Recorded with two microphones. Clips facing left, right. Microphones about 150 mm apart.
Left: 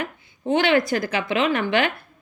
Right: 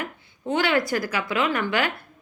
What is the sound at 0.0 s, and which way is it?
Speech, 20° left (ahead or behind).